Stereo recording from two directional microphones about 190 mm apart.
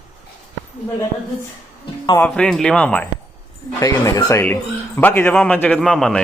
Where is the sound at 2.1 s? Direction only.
5° left (ahead or behind).